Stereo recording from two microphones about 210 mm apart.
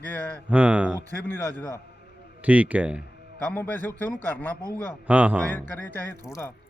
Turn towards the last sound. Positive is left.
turn(degrees=10)  # may be behind; listen again after turning